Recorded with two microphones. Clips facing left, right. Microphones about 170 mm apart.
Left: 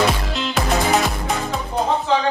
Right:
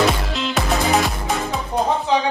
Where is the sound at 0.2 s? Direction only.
Centre (ahead or behind).